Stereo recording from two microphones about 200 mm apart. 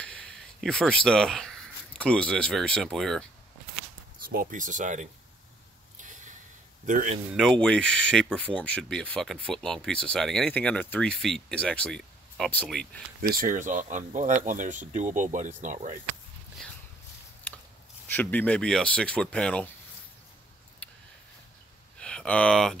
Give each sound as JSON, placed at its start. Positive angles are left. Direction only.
{"t": 0.0, "sound": "speech", "side_deg": 5}
{"t": 4.3, "sound": "speech", "side_deg": -45}
{"t": 6.9, "sound": "speech", "side_deg": -40}
{"t": 7.3, "sound": "speech", "side_deg": 5}
{"t": 13.2, "sound": "speech", "side_deg": -45}
{"t": 17.5, "sound": "biting", "side_deg": 5}
{"t": 18.1, "sound": "speech", "side_deg": 10}
{"t": 20.8, "sound": "a sound", "side_deg": 5}
{"t": 22.0, "sound": "speech", "side_deg": 5}